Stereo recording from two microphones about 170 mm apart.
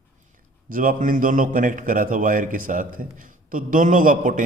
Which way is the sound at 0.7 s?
55° right (ahead or behind).